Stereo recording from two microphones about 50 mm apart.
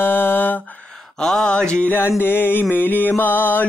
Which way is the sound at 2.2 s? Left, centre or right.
Left.